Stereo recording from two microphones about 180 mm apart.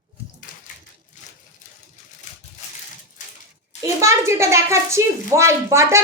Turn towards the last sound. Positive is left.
turn(degrees=-15)  # may be behind; listen again after turning